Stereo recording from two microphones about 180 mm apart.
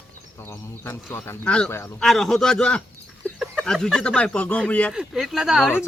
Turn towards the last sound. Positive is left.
turn(degrees=0)  # may be behind; listen again after turning